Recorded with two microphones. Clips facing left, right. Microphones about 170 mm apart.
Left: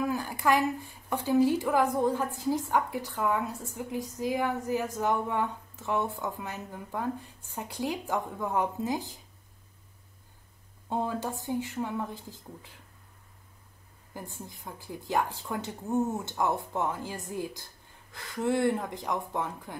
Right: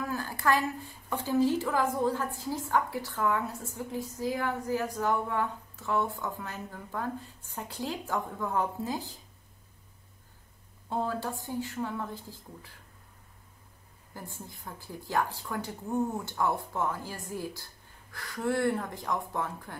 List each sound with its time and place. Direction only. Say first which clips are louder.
0.0 s a woman's voice: left 2 dB; 15° left (ahead or behind)
10.9 s a woman's voice: left 1 dB; 15° left (ahead or behind)
14.1 s speech: left 2 dB; 20° left (ahead or behind)